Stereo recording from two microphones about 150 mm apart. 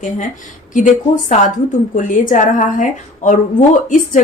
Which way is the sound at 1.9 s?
60° left (ahead or behind).